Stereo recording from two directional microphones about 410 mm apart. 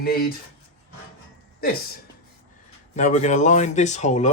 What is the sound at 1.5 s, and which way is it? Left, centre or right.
Speech, left.